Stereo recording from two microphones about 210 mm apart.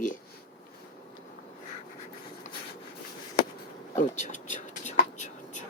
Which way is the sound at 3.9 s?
35° left (ahead or behind).